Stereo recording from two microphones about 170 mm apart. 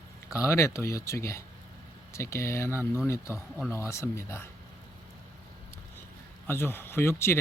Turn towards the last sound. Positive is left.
turn(degrees=15)  # may be behind; listen again after turning